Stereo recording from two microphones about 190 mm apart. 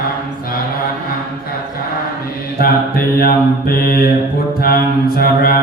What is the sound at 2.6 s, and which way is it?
Mantra, 50° left (ahead or behind).